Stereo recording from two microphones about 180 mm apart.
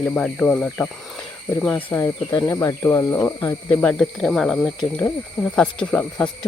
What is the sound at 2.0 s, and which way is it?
Speech, 20° left (ahead or behind).